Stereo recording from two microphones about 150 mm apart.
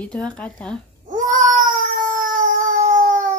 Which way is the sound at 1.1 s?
60° right (ahead or behind).